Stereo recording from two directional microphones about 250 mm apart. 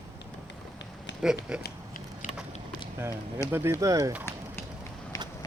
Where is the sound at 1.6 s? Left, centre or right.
Left.